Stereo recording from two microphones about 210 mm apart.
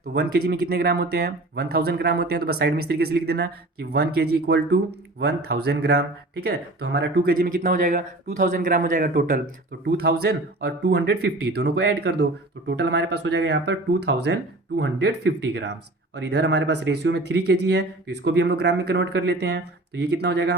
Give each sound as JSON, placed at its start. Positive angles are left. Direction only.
{"t": 0.0, "sound": "speech", "side_deg": -50}